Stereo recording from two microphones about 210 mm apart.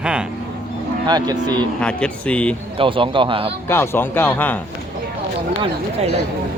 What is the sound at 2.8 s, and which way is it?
Speech, 25° right (ahead or behind).